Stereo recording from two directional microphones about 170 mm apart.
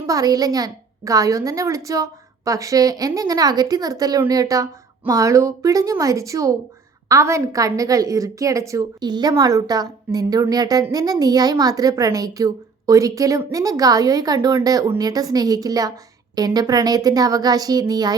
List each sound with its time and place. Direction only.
0.0 s a woman's voice: 20° right (ahead or behind)